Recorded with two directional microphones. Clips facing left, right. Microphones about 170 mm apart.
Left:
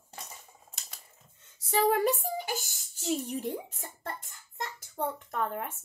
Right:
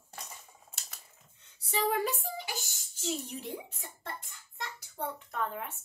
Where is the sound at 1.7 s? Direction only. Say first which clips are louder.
Left 5 dB; 45° left (ahead or behind).